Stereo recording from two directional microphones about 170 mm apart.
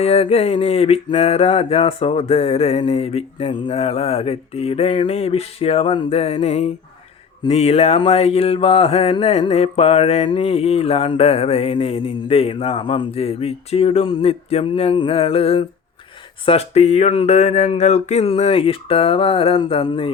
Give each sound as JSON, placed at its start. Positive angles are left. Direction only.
{"t": 0.0, "sound": "mantra", "side_deg": 35}